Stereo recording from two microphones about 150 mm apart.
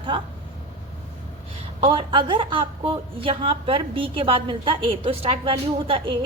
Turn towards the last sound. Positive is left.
turn(degrees=-35)  # may be behind; listen again after turning